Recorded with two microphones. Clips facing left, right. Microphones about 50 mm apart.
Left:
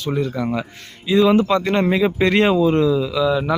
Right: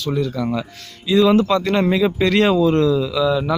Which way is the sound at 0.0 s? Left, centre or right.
Left.